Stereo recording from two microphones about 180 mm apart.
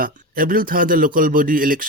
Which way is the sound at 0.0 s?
50° right (ahead or behind).